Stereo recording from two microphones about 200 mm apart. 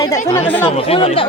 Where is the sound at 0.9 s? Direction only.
30° left (ahead or behind).